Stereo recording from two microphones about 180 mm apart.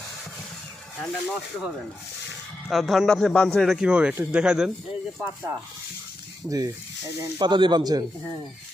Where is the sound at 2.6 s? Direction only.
Centre (ahead or behind).